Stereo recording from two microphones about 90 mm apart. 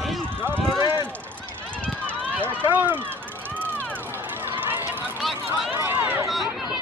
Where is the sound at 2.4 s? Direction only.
20° right (ahead or behind).